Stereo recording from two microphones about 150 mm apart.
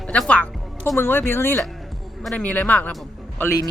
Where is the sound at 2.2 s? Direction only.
5° left (ahead or behind).